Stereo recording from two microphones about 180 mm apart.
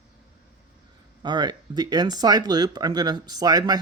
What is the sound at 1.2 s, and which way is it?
Speech, 25° right (ahead or behind).